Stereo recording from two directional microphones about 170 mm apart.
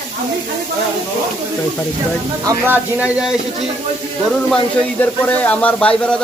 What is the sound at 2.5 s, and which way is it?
Speech, 10° right (ahead or behind).